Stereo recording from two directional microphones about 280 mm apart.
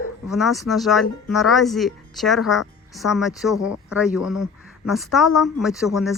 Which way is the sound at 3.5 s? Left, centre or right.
Left.